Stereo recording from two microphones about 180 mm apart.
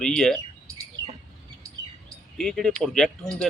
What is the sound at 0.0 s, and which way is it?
Speech, 5° left (ahead or behind).